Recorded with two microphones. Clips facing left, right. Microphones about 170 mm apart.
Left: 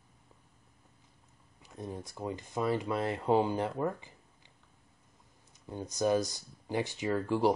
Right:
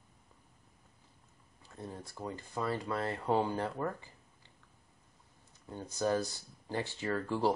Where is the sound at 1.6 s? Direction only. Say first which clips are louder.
Left 4 dB; 15° left (ahead or behind).